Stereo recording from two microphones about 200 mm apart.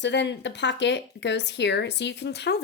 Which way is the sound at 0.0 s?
60° left (ahead or behind).